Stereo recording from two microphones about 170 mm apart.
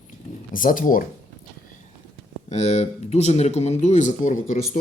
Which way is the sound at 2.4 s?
40° left (ahead or behind).